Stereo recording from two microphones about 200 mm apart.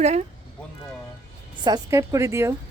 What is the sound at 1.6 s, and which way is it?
Speech, 20° right (ahead or behind).